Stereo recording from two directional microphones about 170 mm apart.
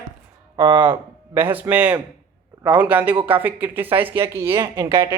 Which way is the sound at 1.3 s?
10° right (ahead or behind).